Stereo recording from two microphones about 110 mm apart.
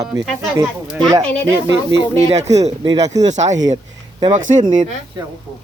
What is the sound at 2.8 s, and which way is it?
Speech, 35° right (ahead or behind).